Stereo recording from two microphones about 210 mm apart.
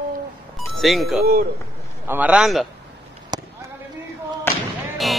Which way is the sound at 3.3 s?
20° right (ahead or behind).